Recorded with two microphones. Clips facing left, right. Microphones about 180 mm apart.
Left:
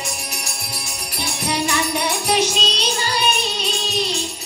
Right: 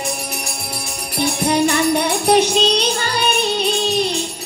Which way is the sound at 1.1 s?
55° right (ahead or behind).